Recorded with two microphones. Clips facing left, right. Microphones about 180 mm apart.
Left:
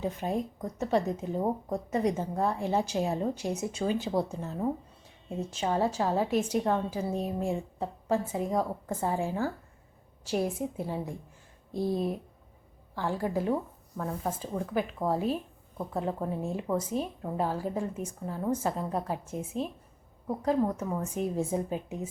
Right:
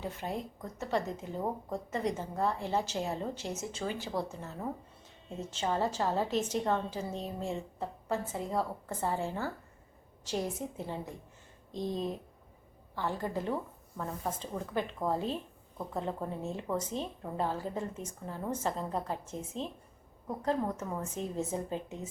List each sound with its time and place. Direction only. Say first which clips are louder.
0.0 s speech: left 6 dB; 15° left (ahead or behind)